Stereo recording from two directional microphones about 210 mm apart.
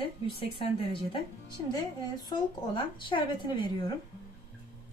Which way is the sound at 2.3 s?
20° left (ahead or behind).